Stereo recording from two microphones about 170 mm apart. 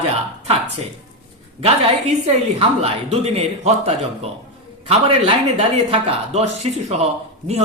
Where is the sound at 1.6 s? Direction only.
35° right (ahead or behind).